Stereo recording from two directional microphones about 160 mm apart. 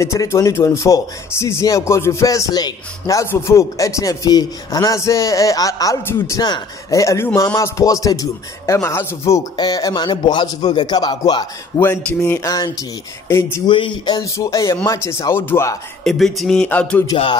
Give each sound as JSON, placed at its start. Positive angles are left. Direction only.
{"t": 0.0, "sound": "speech", "side_deg": 20}
{"t": 11.8, "sound": "speech", "side_deg": 15}
{"t": 13.7, "sound": "speech", "side_deg": 30}
{"t": 16.0, "sound": "a sound", "side_deg": 5}
{"t": 17.0, "sound": "speech", "side_deg": 30}